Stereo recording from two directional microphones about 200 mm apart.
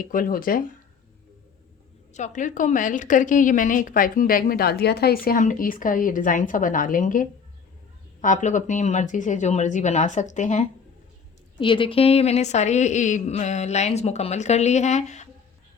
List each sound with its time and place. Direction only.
0.0 s a woman's voice: 45° left (ahead or behind)
2.1 s a woman's voice: 40° left (ahead or behind)
11.6 s a woman's voice: 25° left (ahead or behind)